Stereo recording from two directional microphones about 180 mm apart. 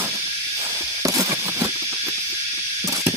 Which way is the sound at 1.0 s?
20° right (ahead or behind).